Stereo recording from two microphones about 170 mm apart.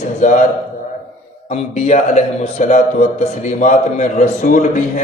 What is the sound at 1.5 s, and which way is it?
A man's voice, 45° left (ahead or behind).